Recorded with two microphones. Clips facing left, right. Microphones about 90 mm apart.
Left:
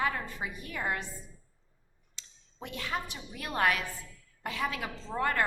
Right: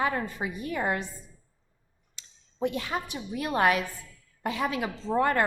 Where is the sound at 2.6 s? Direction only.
20° right (ahead or behind).